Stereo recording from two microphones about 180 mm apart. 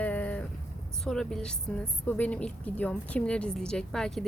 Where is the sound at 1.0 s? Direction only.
5° left (ahead or behind).